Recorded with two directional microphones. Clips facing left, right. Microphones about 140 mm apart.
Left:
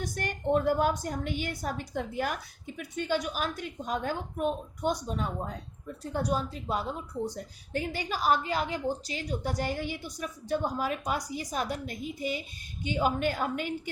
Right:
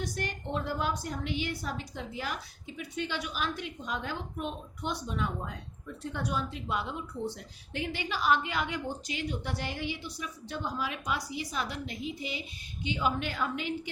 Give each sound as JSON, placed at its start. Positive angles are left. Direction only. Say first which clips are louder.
{"t": 0.0, "sound": "speech", "louder": "left 3 dB", "side_deg": 50}